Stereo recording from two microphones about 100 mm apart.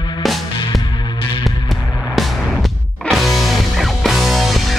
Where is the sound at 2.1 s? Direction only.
Centre (ahead or behind).